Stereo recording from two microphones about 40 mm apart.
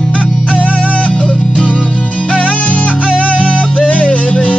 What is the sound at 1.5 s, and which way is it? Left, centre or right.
Music, right.